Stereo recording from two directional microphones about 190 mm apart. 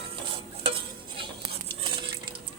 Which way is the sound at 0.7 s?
25° right (ahead or behind).